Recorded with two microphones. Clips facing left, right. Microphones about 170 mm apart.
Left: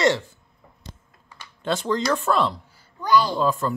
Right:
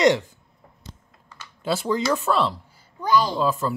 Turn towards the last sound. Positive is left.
turn(degrees=0)  # may be behind; listen again after turning